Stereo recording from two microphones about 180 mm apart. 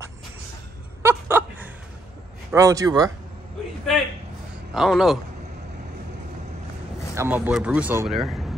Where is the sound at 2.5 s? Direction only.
20° right (ahead or behind).